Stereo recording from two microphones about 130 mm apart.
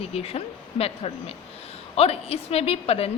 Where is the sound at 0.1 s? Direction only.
50° left (ahead or behind).